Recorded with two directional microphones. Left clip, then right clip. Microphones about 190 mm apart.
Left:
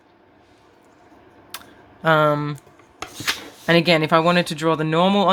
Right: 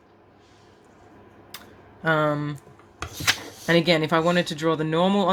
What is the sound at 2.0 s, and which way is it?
Speech, 20° left (ahead or behind).